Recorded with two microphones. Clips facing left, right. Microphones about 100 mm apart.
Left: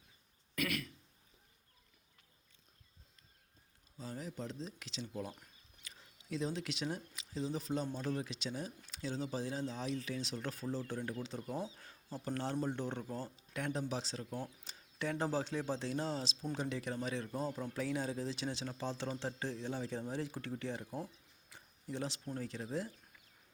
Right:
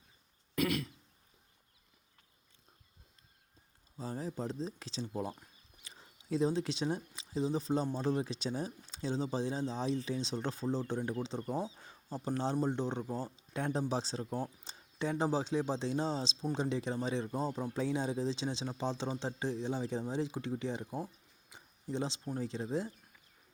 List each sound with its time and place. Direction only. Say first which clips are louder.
0.5 s throat clearing: right 6 dB; 25° right (ahead or behind)
4.1 s speech: right 5 dB; 35° right (ahead or behind); by 21.1 s 15° right (ahead or behind)
21.5 s a sound: right 5 dB; 25° right (ahead or behind)
22.3 s speech: right 5 dB; 20° right (ahead or behind)